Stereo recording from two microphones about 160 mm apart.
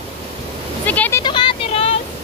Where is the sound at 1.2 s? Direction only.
30° left (ahead or behind).